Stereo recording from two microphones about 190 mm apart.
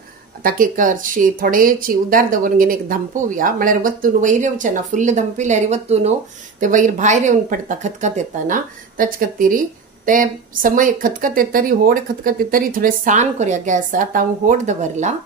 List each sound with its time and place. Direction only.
0.4 s speech: 45° right (ahead or behind)